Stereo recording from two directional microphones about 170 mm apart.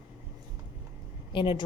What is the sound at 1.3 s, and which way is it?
Speech, 30° left (ahead or behind).